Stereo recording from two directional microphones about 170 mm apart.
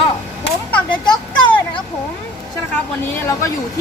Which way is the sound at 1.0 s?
25° left (ahead or behind).